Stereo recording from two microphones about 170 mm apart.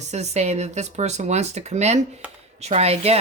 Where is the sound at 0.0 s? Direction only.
40° right (ahead or behind).